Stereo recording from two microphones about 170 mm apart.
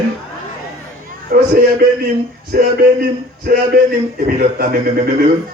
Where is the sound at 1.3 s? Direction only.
60° right (ahead or behind).